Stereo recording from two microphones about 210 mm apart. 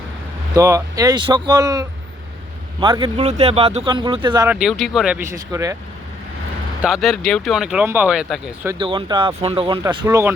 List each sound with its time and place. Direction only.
0.5 s speech: 15° right (ahead or behind)
4.4 s speech: 5° right (ahead or behind)
6.8 s speech: centre (ahead or behind)
8.8 s speech: 25° right (ahead or behind)